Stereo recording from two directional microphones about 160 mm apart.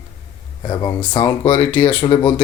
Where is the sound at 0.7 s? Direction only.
30° left (ahead or behind).